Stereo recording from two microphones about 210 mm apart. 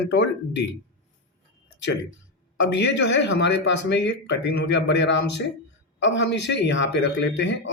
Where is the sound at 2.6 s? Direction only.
60° left (ahead or behind).